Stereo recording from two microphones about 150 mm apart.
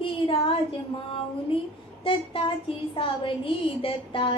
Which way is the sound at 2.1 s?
35° left (ahead or behind).